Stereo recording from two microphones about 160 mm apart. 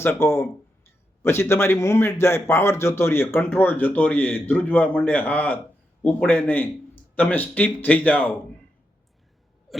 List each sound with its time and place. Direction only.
0.0 s speech: 15° left (ahead or behind)